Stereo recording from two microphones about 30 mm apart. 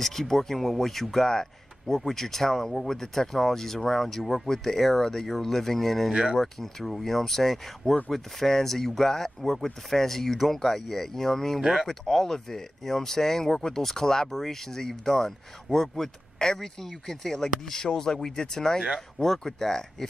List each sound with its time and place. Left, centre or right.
0.0 s speech: centre
1.3 s speech: centre